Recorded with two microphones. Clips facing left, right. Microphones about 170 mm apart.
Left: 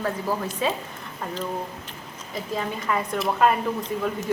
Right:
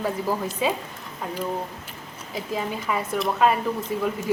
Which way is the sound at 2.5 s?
5° right (ahead or behind).